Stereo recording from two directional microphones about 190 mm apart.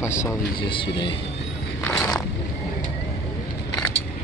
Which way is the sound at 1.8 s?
5° left (ahead or behind).